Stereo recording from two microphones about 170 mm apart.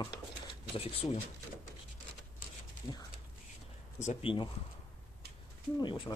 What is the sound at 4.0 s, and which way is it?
Speech, 45° left (ahead or behind).